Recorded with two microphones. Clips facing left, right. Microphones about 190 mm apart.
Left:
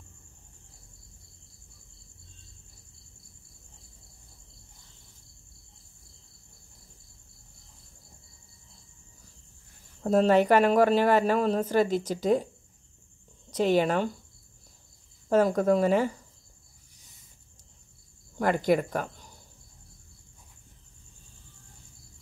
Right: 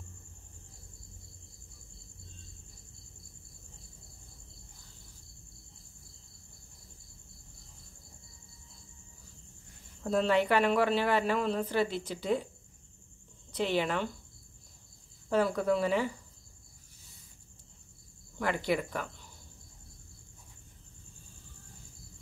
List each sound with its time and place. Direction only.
10.0 s a woman's voice: 45° left (ahead or behind)
13.5 s speech: 45° left (ahead or behind)
15.2 s a woman's voice: 45° left (ahead or behind)
18.4 s a woman's voice: 45° left (ahead or behind)